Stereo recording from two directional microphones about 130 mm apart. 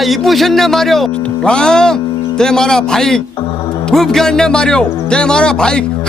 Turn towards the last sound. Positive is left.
turn(degrees=5)  # may be behind; listen again after turning